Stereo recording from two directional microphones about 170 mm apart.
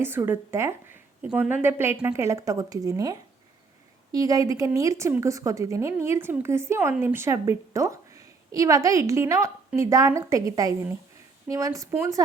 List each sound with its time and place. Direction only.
0.0 s a woman's voice: 15° right (ahead or behind)